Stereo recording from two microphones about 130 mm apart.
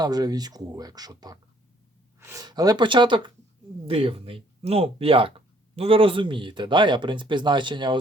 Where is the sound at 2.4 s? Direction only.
30° right (ahead or behind).